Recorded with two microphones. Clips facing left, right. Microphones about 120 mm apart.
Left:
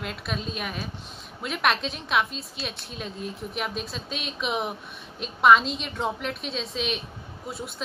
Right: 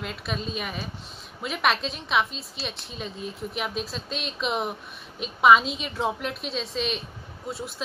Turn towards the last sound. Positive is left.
turn(degrees=0)  # may be behind; listen again after turning